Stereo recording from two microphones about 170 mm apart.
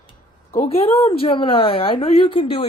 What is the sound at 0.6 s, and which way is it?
A woman's voice, 35° left (ahead or behind).